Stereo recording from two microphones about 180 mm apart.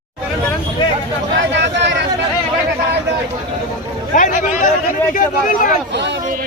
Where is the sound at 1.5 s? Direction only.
80° right.